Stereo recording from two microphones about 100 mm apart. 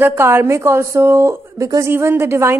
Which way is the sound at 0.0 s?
25° right (ahead or behind).